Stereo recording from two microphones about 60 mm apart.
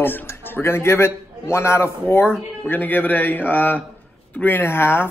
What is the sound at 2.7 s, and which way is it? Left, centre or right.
A man's voice, left.